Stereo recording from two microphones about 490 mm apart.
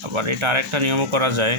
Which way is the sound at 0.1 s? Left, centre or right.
Right.